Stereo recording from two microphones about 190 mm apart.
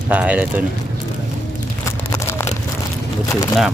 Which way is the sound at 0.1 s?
10° right (ahead or behind).